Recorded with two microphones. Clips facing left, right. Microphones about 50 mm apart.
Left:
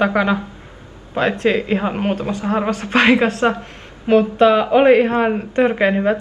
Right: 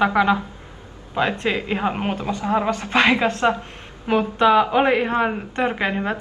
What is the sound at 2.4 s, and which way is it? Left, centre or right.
Speech, left.